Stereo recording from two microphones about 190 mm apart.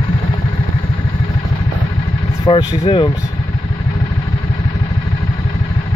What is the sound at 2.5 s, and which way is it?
Speech, 25° left (ahead or behind).